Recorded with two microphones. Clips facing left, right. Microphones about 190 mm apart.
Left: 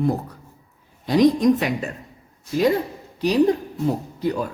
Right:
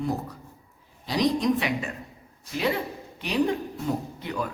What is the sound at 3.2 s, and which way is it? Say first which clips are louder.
Speech: left 7 dB; 40° left (ahead or behind).